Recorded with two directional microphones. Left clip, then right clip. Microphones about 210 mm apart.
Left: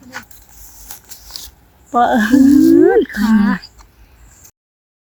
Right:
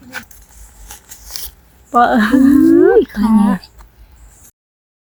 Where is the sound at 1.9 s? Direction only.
Centre (ahead or behind).